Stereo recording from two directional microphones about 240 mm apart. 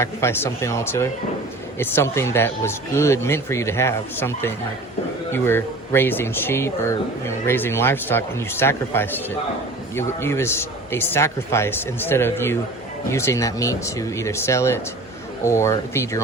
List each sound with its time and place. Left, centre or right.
0.0 s speech: centre